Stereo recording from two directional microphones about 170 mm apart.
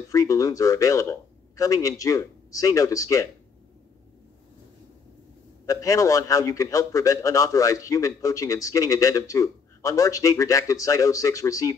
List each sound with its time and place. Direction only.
0.1 s a man's voice: 20° left (ahead or behind)
5.7 s a man's voice: 20° left (ahead or behind)